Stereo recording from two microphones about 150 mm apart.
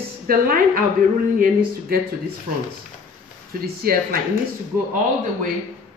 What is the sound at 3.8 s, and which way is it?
Speech, 75° right (ahead or behind).